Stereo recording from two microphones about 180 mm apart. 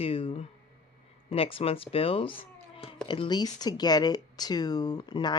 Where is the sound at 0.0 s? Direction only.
30° left (ahead or behind).